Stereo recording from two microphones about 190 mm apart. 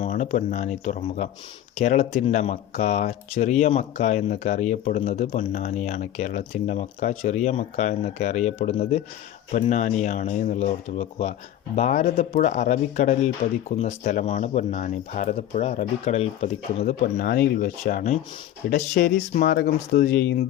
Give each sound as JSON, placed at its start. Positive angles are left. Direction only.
{"t": 0.0, "sound": "speech", "side_deg": 40}
{"t": 17.2, "sound": "speech", "side_deg": 55}
{"t": 18.9, "sound": "speech", "side_deg": 60}